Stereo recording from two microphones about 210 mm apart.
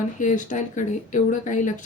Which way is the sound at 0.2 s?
40° left (ahead or behind).